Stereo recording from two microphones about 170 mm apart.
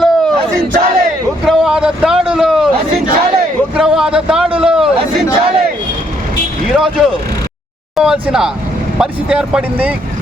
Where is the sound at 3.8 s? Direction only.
5° right (ahead or behind).